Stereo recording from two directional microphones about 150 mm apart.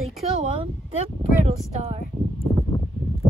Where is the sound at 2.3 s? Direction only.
20° left (ahead or behind).